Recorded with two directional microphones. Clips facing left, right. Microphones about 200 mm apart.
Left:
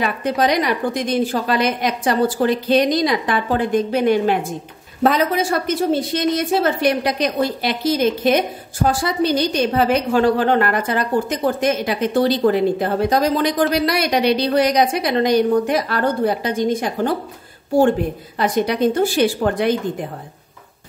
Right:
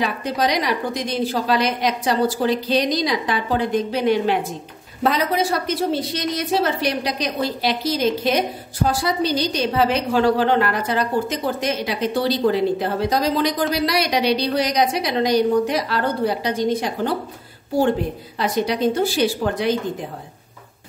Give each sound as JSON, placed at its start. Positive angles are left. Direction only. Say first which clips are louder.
{"t": 0.0, "sound": "a woman's voice", "louder": "left 3 dB", "side_deg": 55}
{"t": 18.4, "sound": "a woman's voice", "louder": "left 3 dB", "side_deg": 50}